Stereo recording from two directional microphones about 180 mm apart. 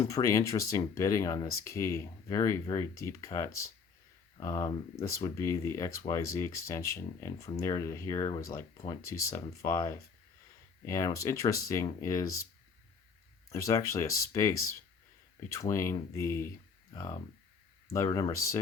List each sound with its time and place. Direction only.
0.0 s speech: 20° left (ahead or behind)
13.5 s speech: 15° left (ahead or behind)
15.7 s speech: 15° left (ahead or behind)
17.9 s speech: 20° left (ahead or behind)